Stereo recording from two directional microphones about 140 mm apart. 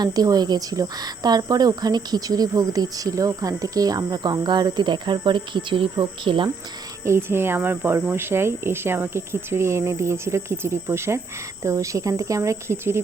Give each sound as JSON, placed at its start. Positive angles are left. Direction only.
{"t": 0.0, "sound": "speech", "side_deg": -30}
{"t": 7.0, "sound": "speech", "side_deg": -20}